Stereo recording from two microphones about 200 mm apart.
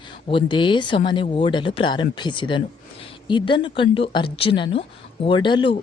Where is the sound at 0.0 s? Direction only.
25° left (ahead or behind).